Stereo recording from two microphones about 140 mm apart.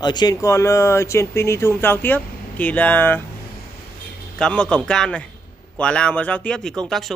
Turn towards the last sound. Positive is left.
turn(degrees=0)  # may be behind; listen again after turning